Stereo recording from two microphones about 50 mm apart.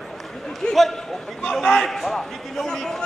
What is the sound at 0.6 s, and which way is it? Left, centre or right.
Speech, centre.